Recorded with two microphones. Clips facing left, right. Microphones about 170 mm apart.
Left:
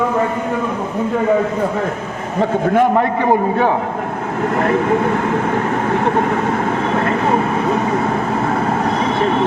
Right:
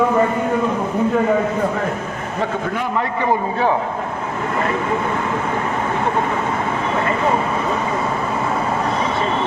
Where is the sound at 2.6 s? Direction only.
45° left (ahead or behind).